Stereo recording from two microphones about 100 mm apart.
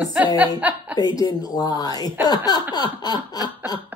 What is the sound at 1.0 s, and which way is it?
Speech, 40° left (ahead or behind).